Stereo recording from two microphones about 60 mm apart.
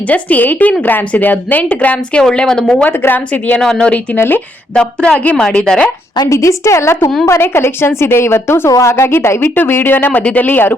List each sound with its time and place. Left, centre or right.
0.1 s speech: left
2.3 s a woman's voice: centre
2.8 s speech: left
3.6 s a woman's voice: centre
4.2 s a woman's voice: left
4.7 s a woman's voice: centre
6.3 s a woman's voice: left
7.4 s a woman's voice: left